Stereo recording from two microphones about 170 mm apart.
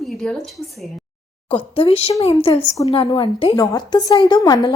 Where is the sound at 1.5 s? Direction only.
35° left (ahead or behind).